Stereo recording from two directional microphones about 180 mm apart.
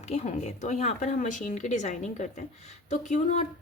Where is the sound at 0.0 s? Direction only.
35° left (ahead or behind).